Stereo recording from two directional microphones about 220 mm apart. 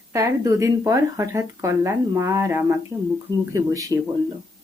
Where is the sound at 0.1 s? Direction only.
15° right (ahead or behind).